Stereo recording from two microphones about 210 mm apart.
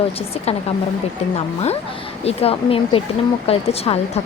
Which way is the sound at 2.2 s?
30° left (ahead or behind).